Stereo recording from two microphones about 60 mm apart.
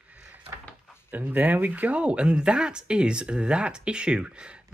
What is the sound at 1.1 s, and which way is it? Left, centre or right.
Speech, right.